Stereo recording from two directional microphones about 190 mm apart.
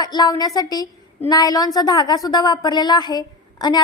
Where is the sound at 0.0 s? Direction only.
20° left (ahead or behind).